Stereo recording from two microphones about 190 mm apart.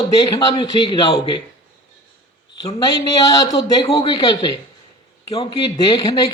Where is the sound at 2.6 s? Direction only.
20° left (ahead or behind).